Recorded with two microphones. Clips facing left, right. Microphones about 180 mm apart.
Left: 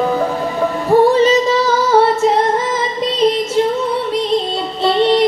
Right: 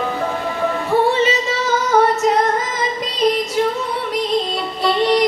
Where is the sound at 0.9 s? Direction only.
35° left (ahead or behind).